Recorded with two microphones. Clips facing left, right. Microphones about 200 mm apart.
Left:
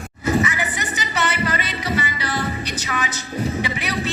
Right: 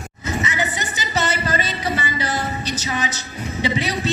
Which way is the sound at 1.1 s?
40° right (ahead or behind).